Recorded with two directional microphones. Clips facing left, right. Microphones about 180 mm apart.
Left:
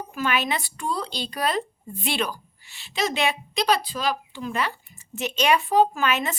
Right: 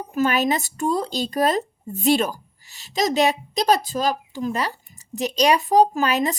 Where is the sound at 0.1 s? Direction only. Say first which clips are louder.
Right 6 dB; 40° right (ahead or behind).